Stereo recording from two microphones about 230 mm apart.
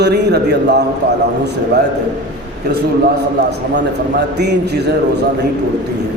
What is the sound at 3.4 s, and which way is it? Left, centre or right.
A man's voice, right.